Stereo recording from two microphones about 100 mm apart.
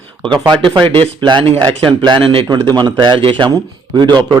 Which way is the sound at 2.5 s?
50° right (ahead or behind).